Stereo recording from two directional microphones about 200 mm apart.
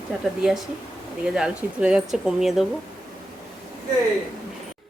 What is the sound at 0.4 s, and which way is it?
A woman's voice, 5° right (ahead or behind).